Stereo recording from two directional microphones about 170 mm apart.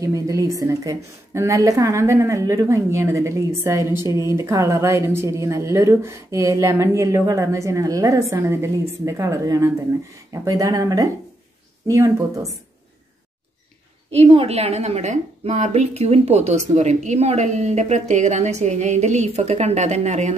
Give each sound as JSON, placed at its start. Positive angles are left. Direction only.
{"t": 0.0, "sound": "a woman's voice", "side_deg": -20}
{"t": 3.8, "sound": "a woman's voice", "side_deg": 25}
{"t": 4.1, "sound": "a woman's voice", "side_deg": -15}
{"t": 14.1, "sound": "a woman's voice", "side_deg": -35}